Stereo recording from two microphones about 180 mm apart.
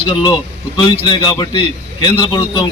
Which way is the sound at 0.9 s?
25° left (ahead or behind).